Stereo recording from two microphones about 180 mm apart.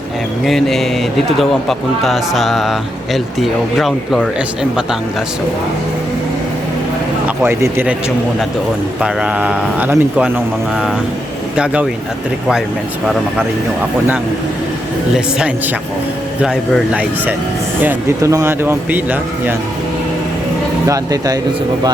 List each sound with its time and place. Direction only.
0.4 s speech: centre (ahead or behind)
7.3 s speech: 10° right (ahead or behind)
9.0 s speech: 5° right (ahead or behind)
11.5 s speech: 5° right (ahead or behind)
15.4 s speech: 5° right (ahead or behind)
17.8 s speech: 15° right (ahead or behind)
20.8 s speech: 20° right (ahead or behind)